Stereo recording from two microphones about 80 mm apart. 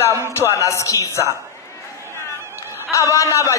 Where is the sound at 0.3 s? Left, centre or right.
Left.